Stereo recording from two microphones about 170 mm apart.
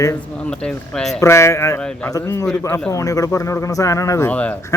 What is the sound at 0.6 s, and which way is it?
Speech, 5° left (ahead or behind).